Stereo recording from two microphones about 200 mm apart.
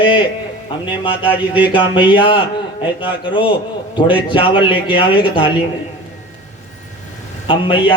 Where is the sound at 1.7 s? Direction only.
25° left (ahead or behind).